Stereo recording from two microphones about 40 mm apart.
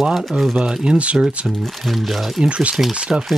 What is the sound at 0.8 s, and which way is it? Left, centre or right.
Speech, right.